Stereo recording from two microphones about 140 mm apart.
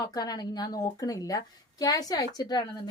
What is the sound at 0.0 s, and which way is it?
A woman's voice, 25° left (ahead or behind).